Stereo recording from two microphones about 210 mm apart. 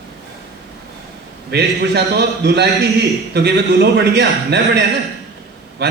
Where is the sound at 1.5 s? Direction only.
55° right (ahead or behind).